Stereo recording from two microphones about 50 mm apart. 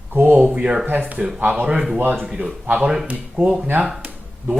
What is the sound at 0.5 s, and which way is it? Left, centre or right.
Speech, right.